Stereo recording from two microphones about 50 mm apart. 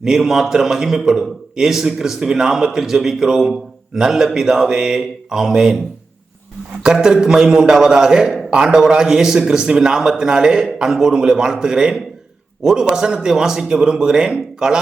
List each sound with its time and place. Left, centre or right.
0.0 s a man's voice: centre
6.8 s a man's voice: centre